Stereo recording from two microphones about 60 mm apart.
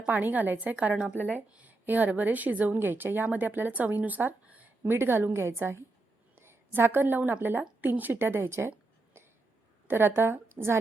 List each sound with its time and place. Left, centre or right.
0.0 s a woman's voice: right
4.8 s a woman's voice: right
9.2 s throat clearing: right
9.8 s a woman's voice: right